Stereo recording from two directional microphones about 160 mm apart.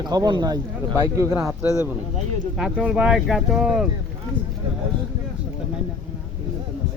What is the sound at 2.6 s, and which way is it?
Speech, 5° right (ahead or behind).